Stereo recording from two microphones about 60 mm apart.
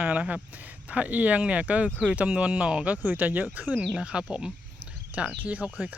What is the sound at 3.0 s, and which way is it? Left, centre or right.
Speech, right.